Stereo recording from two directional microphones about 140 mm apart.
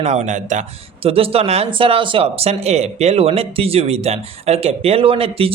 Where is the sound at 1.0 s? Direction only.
45° right (ahead or behind).